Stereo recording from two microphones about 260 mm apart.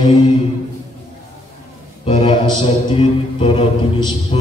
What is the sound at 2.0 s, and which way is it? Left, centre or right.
Mantra, centre.